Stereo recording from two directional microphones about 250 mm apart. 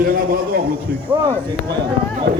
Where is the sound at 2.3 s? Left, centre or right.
Right.